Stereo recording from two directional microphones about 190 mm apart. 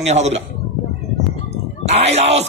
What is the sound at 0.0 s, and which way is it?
Speech, 35° right (ahead or behind).